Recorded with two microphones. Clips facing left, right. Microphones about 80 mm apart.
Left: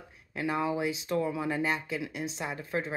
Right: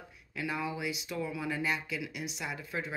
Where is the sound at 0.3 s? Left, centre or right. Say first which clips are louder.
Left 5 dB; left.